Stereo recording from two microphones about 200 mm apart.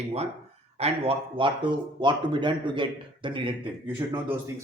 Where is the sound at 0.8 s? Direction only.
30° right (ahead or behind).